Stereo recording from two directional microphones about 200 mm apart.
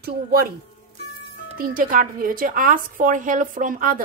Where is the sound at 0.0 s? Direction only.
50° right (ahead or behind).